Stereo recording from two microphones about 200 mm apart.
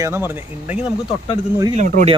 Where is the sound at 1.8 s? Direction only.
40° right (ahead or behind).